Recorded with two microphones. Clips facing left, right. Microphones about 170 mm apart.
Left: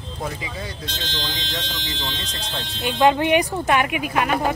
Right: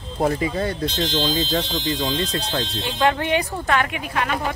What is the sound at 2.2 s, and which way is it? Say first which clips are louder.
Speech: right 8 dB; 65° right (ahead or behind).